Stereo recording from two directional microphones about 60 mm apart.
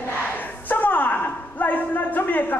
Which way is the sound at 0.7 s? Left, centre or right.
Left.